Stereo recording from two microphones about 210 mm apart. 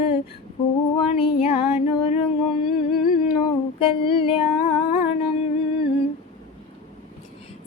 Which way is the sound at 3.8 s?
25° left (ahead or behind).